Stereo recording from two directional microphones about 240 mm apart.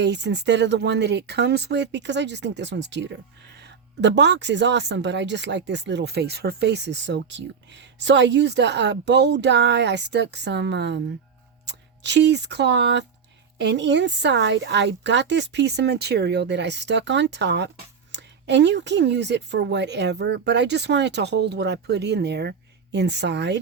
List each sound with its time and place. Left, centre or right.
0.0 s speech: right